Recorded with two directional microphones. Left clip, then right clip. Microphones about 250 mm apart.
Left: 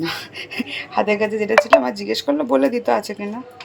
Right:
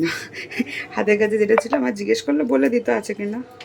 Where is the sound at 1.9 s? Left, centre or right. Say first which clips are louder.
Right 4 dB; right.